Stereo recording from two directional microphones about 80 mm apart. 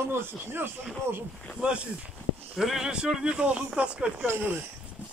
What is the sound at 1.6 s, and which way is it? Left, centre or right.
Speech, centre.